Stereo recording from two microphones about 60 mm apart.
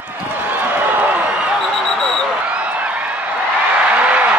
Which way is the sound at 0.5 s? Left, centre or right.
Right.